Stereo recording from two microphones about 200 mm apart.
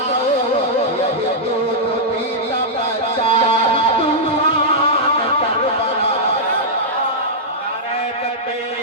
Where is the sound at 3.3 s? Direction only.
30° left (ahead or behind).